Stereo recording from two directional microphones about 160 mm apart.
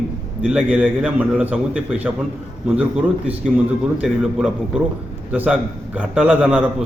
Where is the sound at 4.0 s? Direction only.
5° right (ahead or behind).